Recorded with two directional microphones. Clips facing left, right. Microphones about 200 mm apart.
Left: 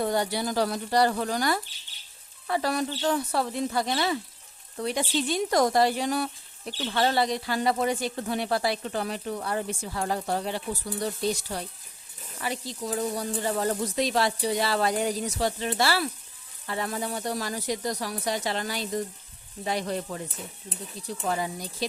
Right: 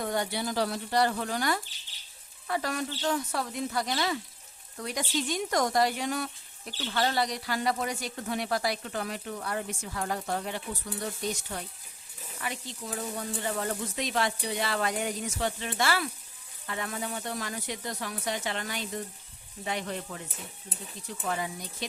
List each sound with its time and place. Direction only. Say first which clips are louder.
0.0 s speech: left 4 dB; 35° left (ahead or behind)